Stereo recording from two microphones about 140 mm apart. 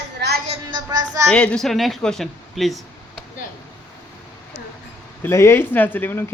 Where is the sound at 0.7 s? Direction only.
30° right (ahead or behind).